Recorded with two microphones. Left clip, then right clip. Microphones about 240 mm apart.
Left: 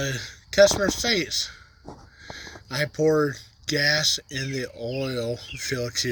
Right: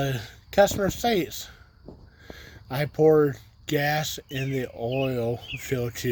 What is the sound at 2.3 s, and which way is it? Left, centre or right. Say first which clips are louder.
Speech: left 2 dB; centre.